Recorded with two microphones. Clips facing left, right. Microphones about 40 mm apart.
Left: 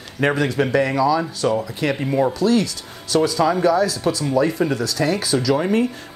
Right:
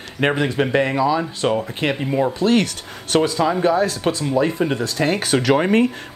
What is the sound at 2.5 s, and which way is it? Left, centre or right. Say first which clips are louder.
Speech: right 1 dB; right.